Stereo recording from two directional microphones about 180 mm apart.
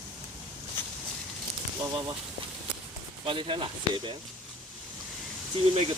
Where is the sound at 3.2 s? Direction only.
30° right (ahead or behind).